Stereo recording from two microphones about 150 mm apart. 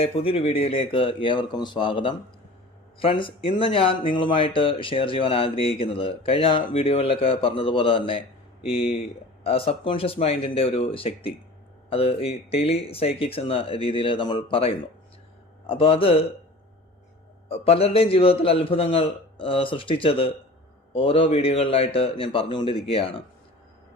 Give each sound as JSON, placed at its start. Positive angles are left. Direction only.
{"t": 0.0, "sound": "speech", "side_deg": 40}
{"t": 9.4, "sound": "speech", "side_deg": 40}
{"t": 17.5, "sound": "speech", "side_deg": 40}